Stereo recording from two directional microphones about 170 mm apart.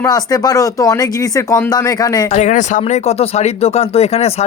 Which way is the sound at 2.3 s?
45° left (ahead or behind).